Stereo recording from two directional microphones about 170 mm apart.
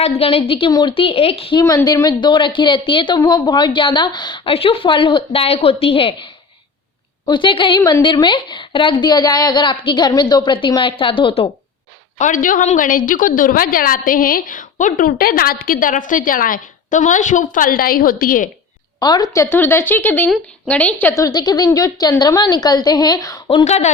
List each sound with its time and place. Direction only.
0.0 s a woman's voice: 35° left (ahead or behind)
1.6 s speech: 20° left (ahead or behind)
7.8 s a woman's voice: 15° left (ahead or behind)
8.0 s speech: 25° left (ahead or behind)
12.2 s a woman's voice: 50° left (ahead or behind)
18.9 s a woman's voice: 25° left (ahead or behind)
23.5 s a woman's voice: 35° left (ahead or behind)